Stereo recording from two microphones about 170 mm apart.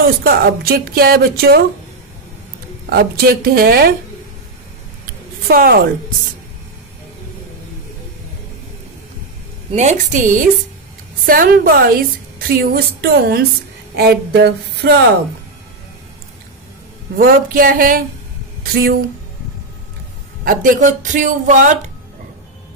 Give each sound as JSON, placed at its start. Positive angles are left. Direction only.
{"t": 0.2, "sound": "a woman's voice", "side_deg": -60}
{"t": 2.9, "sound": "a woman's voice", "side_deg": -65}
{"t": 5.5, "sound": "a woman's voice", "side_deg": -55}
{"t": 9.7, "sound": "a woman's voice", "side_deg": -45}
{"t": 13.9, "sound": "a sound", "side_deg": -70}
{"t": 17.2, "sound": "a woman's voice", "side_deg": -55}
{"t": 20.4, "sound": "speech", "side_deg": -55}